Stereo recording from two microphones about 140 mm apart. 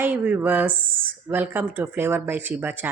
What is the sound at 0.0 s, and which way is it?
Speech, 10° right (ahead or behind).